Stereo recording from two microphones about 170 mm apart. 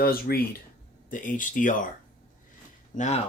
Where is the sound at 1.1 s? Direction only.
50° left (ahead or behind).